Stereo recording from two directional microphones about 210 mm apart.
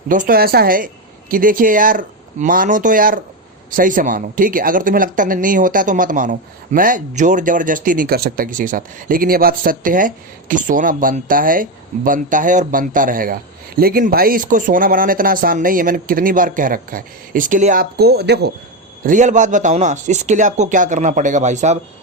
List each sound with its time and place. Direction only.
0.1 s a woman's voice: 40° right (ahead or behind)
19.0 s speech: 35° right (ahead or behind)